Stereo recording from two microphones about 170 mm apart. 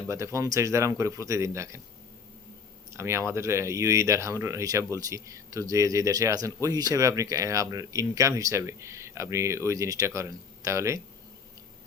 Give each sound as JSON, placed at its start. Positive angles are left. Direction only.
{"t": 0.1, "sound": "speech", "side_deg": -15}
{"t": 2.9, "sound": "speech", "side_deg": -15}